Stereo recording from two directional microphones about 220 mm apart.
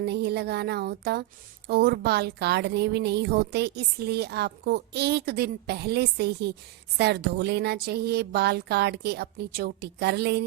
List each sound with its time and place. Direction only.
0.0 s a woman's voice: 50° right (ahead or behind)